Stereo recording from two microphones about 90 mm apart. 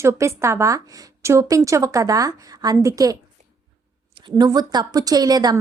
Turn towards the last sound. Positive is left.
turn(degrees=-45)  # may be behind; listen again after turning